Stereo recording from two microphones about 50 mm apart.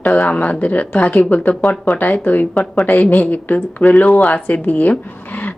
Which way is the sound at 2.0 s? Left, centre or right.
Left.